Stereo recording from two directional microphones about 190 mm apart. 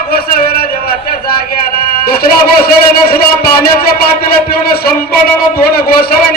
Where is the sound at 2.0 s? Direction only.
55° left (ahead or behind).